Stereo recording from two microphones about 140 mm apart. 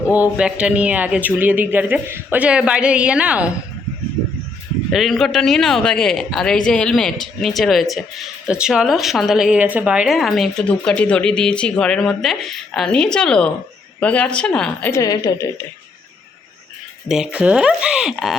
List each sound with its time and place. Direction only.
0.1 s speech: 10° right (ahead or behind)
4.9 s a man's voice: centre (ahead or behind)
15.0 s a woman's voice: 25° left (ahead or behind)
17.1 s a man's voice: 5° right (ahead or behind)